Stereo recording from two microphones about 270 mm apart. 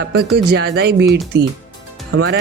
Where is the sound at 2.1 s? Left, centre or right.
Right.